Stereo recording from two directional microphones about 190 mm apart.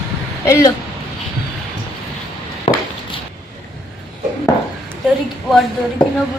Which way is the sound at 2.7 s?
30° left (ahead or behind).